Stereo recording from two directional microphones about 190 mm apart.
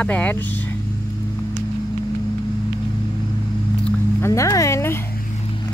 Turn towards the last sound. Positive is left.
turn(degrees=15)  # may be behind; listen again after turning